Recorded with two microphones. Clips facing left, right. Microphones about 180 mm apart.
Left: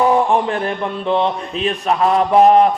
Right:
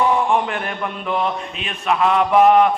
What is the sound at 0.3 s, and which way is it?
A man's voice, 35° left (ahead or behind).